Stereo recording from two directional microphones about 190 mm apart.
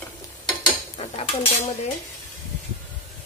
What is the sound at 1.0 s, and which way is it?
Dishes, 30° left (ahead or behind).